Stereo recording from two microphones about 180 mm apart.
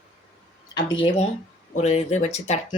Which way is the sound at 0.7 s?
25° left (ahead or behind).